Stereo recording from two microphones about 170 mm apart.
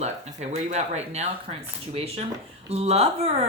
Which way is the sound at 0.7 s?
40° right (ahead or behind).